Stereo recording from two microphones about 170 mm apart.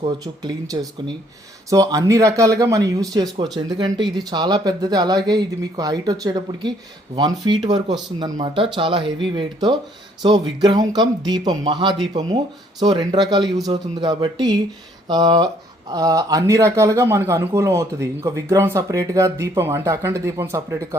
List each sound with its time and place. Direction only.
0.0 s a man's voice: 25° right (ahead or behind)